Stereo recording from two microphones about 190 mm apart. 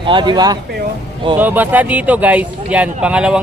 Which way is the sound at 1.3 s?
10° right (ahead or behind).